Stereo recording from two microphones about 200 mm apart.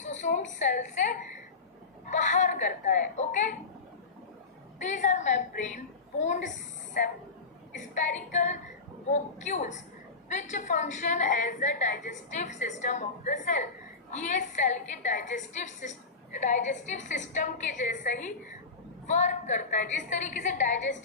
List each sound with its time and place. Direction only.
0.0 s a sound: 35° left (ahead or behind)
2.0 s a woman's voice: 35° left (ahead or behind)
4.8 s a woman's voice: 35° left (ahead or behind)
7.7 s a woman's voice: 40° left (ahead or behind)